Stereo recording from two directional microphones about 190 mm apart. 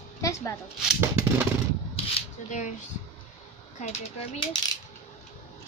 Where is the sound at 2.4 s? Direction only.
40° left (ahead or behind).